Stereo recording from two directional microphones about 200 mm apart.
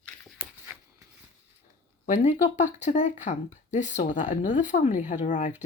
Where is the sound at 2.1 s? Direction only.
40° left (ahead or behind).